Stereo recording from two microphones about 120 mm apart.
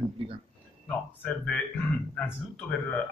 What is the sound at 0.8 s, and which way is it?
Speech, 10° left (ahead or behind).